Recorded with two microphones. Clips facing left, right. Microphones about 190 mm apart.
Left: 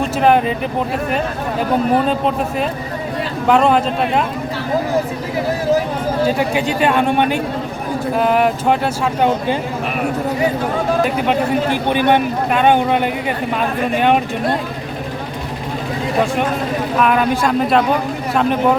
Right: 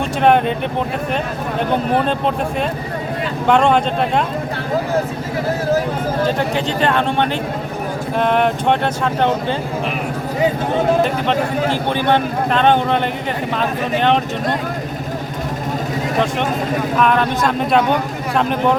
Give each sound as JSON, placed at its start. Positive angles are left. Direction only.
{"t": 0.0, "sound": "speech", "side_deg": 0}
{"t": 2.0, "sound": "speech", "side_deg": 0}
{"t": 6.2, "sound": "a man's voice", "side_deg": 10}
{"t": 11.0, "sound": "a man's voice", "side_deg": 10}
{"t": 17.0, "sound": "speech", "side_deg": 5}